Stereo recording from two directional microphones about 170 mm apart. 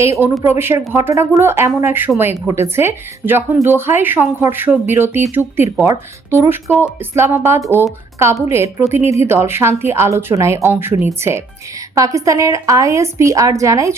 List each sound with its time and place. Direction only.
0.0 s a woman's voice: 15° right (ahead or behind)